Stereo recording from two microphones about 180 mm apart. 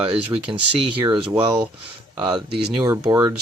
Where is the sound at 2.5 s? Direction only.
65° right (ahead or behind).